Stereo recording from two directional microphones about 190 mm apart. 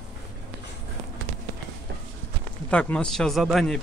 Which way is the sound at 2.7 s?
5° left (ahead or behind).